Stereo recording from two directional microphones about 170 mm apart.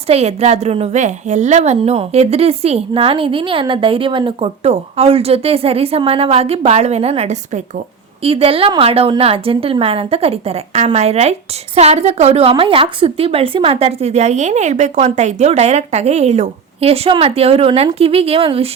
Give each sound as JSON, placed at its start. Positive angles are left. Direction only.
{"t": 0.1, "sound": "a woman's voice", "side_deg": -40}